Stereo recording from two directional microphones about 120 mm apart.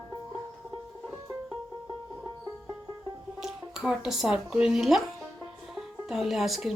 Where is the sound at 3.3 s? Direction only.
5° right (ahead or behind).